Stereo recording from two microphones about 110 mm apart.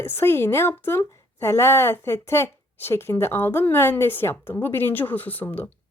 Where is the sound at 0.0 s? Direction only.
20° left (ahead or behind).